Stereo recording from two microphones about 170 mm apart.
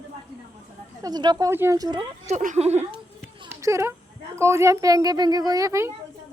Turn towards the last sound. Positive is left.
turn(degrees=-20)  # may be behind; listen again after turning